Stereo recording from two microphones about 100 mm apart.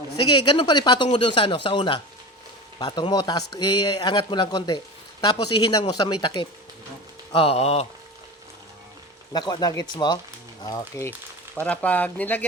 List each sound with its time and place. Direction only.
0.3 s speech: 55° left (ahead or behind)
1.0 s speech: 60° left (ahead or behind)
2.7 s speech: 45° left (ahead or behind)
7.3 s speech: 75° left (ahead or behind); by 7.9 s 90° left
9.3 s speech: 45° left (ahead or behind)
10.6 s speech: 35° left (ahead or behind)
11.6 s speech: 15° left (ahead or behind)